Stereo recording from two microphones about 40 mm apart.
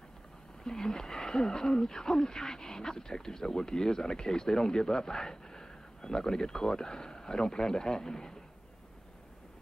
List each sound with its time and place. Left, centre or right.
0.7 s speech: centre